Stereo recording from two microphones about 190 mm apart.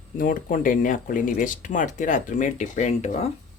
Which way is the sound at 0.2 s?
45° left (ahead or behind).